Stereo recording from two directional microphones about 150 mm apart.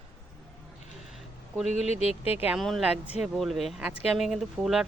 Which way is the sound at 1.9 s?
45° left (ahead or behind).